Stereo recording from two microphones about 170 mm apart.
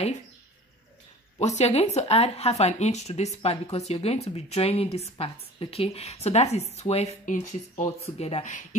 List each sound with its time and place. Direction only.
1.4 s speech: 40° left (ahead or behind)